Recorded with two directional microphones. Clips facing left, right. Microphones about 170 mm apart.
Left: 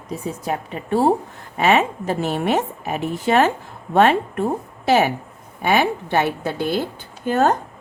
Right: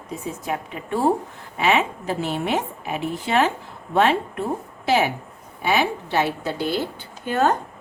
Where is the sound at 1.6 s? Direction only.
45° left (ahead or behind).